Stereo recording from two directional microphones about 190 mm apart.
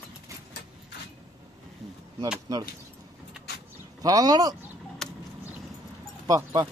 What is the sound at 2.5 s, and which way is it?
Speech, 20° right (ahead or behind).